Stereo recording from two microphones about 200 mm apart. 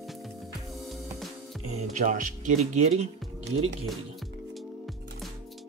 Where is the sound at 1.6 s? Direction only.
35° right (ahead or behind).